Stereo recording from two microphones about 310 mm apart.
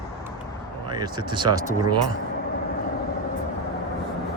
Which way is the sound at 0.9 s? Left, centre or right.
Centre.